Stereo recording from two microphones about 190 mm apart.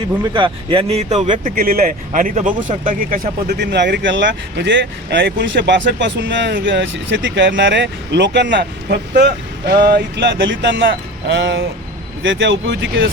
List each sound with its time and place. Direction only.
0.3 s speech: 25° right (ahead or behind); by 3.2 s 45° right (ahead or behind)
3.6 s speech: 65° right (ahead or behind)